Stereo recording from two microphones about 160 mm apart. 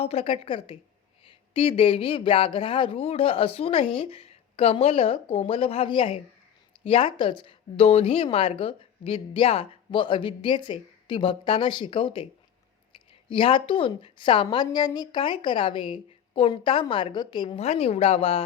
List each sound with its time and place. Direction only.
0.0 s a woman's voice: 40° left (ahead or behind)
13.3 s a woman's voice: 35° left (ahead or behind)